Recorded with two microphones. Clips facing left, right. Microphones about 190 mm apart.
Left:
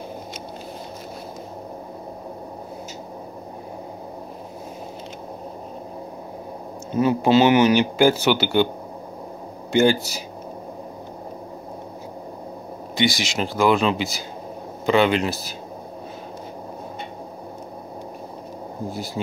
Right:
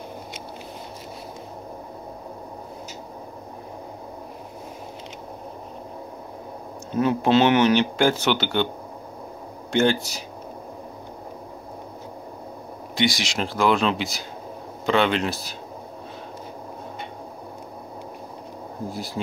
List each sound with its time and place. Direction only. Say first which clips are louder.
6.9 s speech: left 2 dB; 5° left (ahead or behind)
9.7 s speech: left 3 dB; 5° left (ahead or behind)
12.9 s speech: left 1 dB; centre (ahead or behind)